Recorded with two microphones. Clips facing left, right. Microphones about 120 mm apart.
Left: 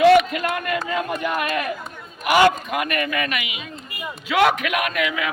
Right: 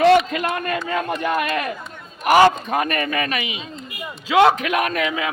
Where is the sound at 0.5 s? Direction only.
30° right (ahead or behind).